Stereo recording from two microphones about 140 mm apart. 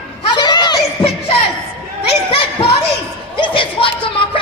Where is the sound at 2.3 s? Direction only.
40° left (ahead or behind).